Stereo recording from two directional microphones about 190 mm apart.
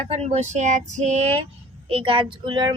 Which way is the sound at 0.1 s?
35° right (ahead or behind).